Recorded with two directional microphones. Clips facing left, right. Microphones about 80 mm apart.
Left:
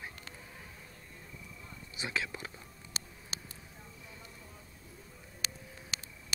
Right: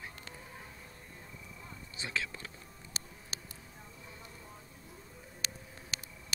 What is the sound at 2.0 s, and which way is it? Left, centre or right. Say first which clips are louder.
Speech: left 2 dB; centre.